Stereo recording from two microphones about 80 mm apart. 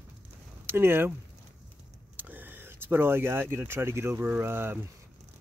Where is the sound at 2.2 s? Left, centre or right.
Right.